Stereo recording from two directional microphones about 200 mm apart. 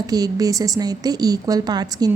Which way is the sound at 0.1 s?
20° right (ahead or behind).